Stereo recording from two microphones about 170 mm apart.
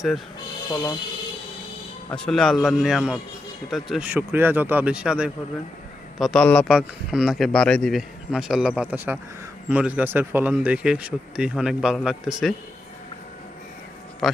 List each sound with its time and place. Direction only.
0.7 s speech: 20° left (ahead or behind)
2.0 s speech: 5° left (ahead or behind)